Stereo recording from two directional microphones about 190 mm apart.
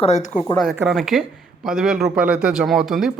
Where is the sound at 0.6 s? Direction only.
Centre (ahead or behind).